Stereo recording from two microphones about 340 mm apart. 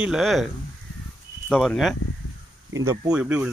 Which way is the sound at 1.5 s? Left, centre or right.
Centre.